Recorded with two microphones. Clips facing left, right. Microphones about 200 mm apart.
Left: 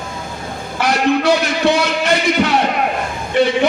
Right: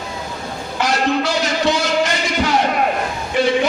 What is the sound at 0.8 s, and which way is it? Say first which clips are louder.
A man's voice: left 3 dB; 60° left (ahead or behind).